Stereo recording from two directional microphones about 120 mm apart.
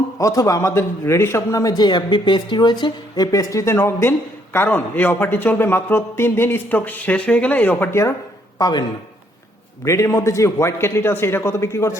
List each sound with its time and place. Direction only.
0.2 s a man's voice: 25° left (ahead or behind)
8.5 s speech: 35° left (ahead or behind)
9.8 s a man's voice: 25° left (ahead or behind)